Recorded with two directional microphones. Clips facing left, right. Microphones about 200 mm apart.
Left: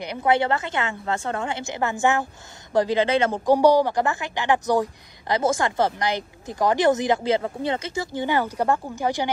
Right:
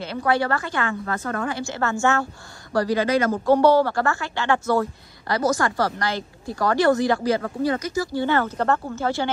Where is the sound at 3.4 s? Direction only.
15° left (ahead or behind).